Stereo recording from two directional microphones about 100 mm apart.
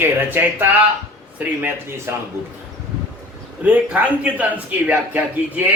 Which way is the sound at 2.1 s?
25° right (ahead or behind).